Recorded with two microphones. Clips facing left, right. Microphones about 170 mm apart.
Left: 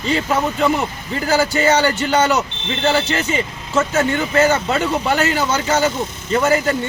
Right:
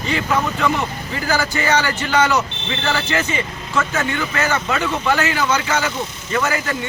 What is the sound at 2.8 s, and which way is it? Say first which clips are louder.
Speech: left 4 dB; 25° left (ahead or behind).